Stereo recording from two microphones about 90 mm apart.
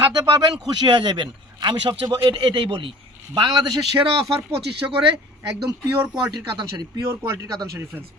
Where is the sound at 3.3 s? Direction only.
50° right (ahead or behind).